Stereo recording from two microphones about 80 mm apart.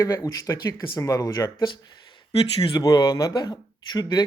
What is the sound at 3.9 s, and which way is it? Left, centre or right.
Speech, left.